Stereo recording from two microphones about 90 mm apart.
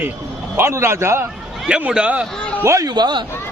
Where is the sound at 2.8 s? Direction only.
50° right (ahead or behind).